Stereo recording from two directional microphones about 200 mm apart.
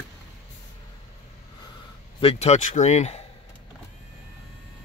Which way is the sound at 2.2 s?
35° left (ahead or behind).